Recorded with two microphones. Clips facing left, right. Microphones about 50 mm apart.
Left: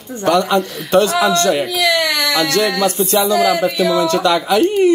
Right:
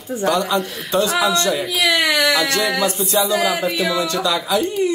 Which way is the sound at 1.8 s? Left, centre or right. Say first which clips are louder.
Left 1 dB; centre.